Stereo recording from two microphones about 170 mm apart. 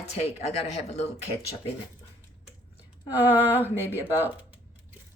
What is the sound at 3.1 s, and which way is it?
Speech, 10° right (ahead or behind).